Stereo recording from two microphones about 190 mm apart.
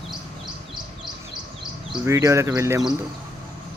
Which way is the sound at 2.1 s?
15° right (ahead or behind).